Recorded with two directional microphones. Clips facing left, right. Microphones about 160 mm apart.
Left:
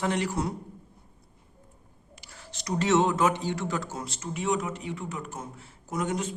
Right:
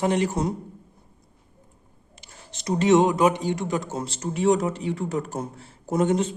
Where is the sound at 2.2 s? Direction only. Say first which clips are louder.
Right 7 dB; 20° right (ahead or behind).